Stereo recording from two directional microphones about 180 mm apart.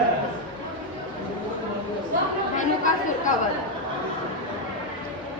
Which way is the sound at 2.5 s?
45° left (ahead or behind).